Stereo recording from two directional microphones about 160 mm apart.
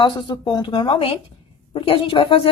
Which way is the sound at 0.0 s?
30° left (ahead or behind).